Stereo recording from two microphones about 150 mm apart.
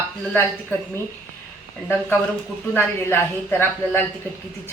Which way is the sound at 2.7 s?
15° left (ahead or behind).